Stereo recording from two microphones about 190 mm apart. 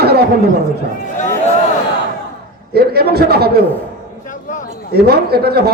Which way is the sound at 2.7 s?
55° right (ahead or behind).